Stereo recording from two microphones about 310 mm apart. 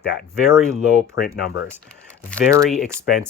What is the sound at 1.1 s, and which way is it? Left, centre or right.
Speech, left.